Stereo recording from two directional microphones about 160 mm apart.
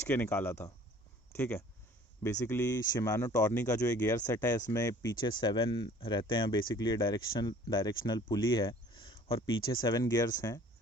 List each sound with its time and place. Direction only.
0.0 s speech: 15° left (ahead or behind)
5.4 s speech: 30° left (ahead or behind)